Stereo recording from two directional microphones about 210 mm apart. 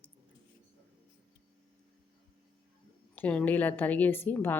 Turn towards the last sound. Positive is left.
turn(degrees=10)  # may be behind; listen again after turning